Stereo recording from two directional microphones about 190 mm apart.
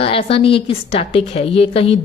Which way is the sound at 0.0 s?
30° left (ahead or behind).